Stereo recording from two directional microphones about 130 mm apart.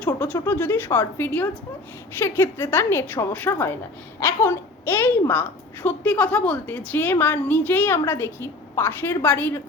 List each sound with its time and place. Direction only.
0.0 s a woman's voice: 10° left (ahead or behind)